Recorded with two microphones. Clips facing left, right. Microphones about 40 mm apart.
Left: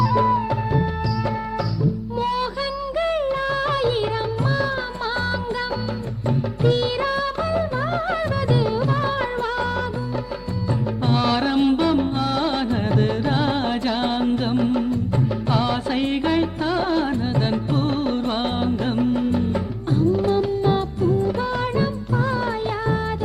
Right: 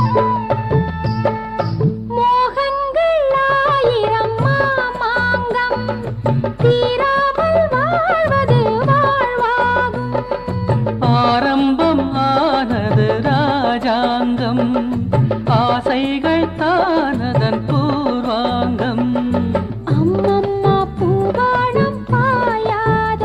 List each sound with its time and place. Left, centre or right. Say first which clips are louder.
0.1 s music: right 4 dB; right
2.1 s music: right 12 dB; right